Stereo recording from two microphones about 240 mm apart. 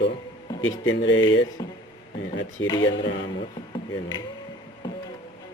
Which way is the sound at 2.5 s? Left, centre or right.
Centre.